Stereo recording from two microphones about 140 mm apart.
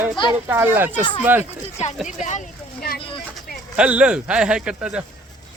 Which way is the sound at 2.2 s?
60° left (ahead or behind).